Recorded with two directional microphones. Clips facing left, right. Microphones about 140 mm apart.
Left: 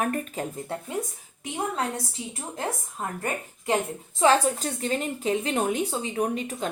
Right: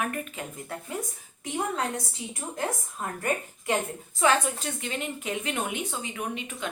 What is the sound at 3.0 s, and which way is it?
Speech, 30° left (ahead or behind).